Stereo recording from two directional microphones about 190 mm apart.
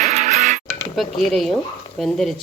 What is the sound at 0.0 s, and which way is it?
Music, 40° right (ahead or behind).